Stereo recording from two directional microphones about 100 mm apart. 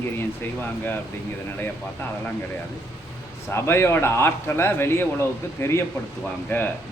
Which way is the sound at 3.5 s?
25° left (ahead or behind).